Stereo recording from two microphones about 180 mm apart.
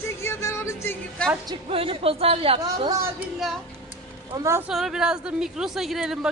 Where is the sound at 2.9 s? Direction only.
15° right (ahead or behind).